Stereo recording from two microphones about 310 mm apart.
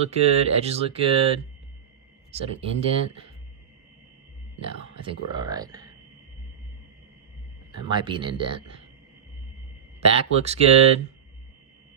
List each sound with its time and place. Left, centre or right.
0.1 s speech: centre
4.6 s speech: centre
7.7 s speech: centre
10.0 s speech: centre